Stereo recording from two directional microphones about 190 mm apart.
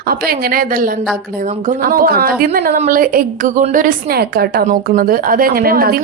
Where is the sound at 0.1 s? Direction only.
50° right (ahead or behind).